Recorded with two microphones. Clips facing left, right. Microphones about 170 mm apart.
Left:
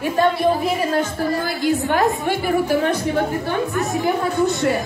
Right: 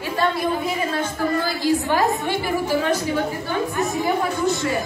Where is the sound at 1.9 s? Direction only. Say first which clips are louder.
Left 2 dB; 55° left (ahead or behind).